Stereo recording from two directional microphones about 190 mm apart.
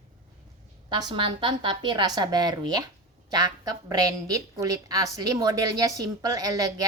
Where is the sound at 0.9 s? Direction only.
20° right (ahead or behind).